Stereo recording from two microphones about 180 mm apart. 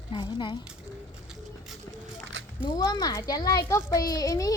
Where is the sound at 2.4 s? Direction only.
90° right.